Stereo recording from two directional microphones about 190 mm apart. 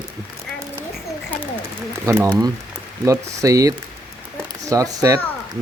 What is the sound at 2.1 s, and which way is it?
A child's voice, 15° right (ahead or behind).